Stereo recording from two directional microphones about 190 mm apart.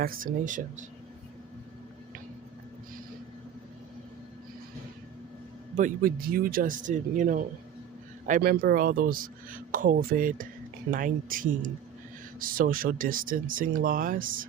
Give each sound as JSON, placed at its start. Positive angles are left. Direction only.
{"t": 0.0, "sound": "speech", "side_deg": -50}
{"t": 5.7, "sound": "speech", "side_deg": -45}